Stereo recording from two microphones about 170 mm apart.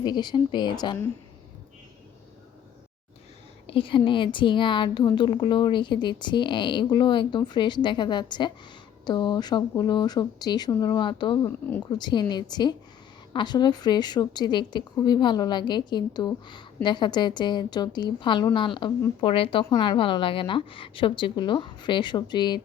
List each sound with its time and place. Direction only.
0.0 s a woman's voice: 25° left (ahead or behind)
3.7 s a woman's voice: 30° left (ahead or behind)
11.4 s speech: 15° left (ahead or behind)
11.9 s a woman's voice: 25° left (ahead or behind)